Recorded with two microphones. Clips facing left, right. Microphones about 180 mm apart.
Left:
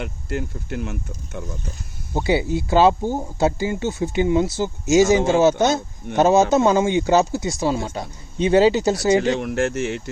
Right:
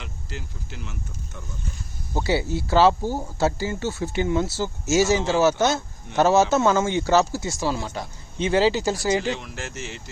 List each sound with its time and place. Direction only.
0.0 s speech: 60° left (ahead or behind)
2.1 s speech: 20° left (ahead or behind)
9.2 s speech: 60° left (ahead or behind)